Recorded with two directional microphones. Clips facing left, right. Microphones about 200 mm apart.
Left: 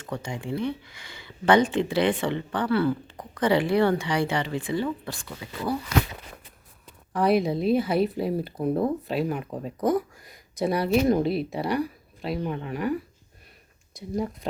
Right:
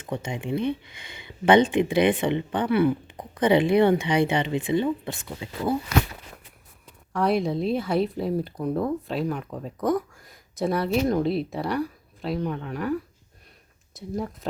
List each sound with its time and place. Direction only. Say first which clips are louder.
0.0 s speech: right 2 dB; 20° right (ahead or behind)
7.1 s speech: left 1 dB; centre (ahead or behind)
14.0 s speech: right 1 dB; centre (ahead or behind)